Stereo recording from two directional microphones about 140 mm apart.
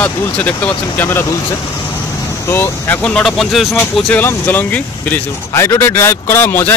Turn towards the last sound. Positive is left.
turn(degrees=15)  # may be behind; listen again after turning